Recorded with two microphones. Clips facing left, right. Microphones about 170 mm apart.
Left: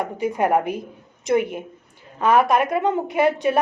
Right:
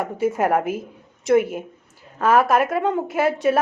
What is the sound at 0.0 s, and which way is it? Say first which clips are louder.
A woman's voice: right 1 dB; 5° right (ahead or behind).